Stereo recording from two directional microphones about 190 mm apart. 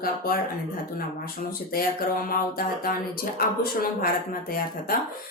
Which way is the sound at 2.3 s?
50° left (ahead or behind).